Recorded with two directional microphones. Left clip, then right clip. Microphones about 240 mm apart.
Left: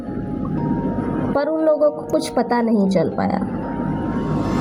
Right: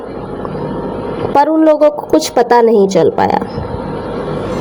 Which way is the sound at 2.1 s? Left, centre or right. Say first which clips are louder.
Right 10 dB; right.